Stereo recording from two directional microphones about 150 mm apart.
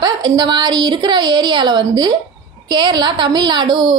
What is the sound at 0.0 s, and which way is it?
A woman's voice, 30° right (ahead or behind).